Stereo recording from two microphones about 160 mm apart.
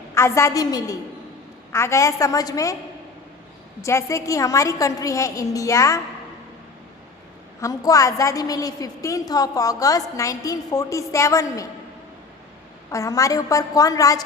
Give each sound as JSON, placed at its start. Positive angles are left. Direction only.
{"t": 0.1, "sound": "a woman's voice", "side_deg": 15}
{"t": 3.8, "sound": "a woman's voice", "side_deg": 20}
{"t": 7.6, "sound": "a woman's voice", "side_deg": 20}
{"t": 12.9, "sound": "a woman's voice", "side_deg": 20}